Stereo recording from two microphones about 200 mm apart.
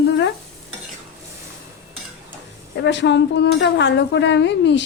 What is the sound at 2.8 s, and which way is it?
Speech, 60° left (ahead or behind).